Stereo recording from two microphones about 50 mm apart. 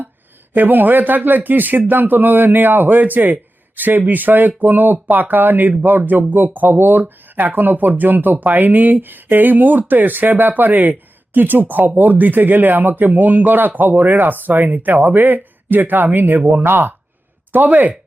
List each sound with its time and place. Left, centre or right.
0.5 s speech: right
16.6 s speech: right
17.5 s speech: right